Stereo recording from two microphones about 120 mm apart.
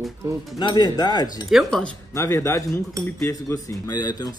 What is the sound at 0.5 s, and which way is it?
Speech, 35° left (ahead or behind).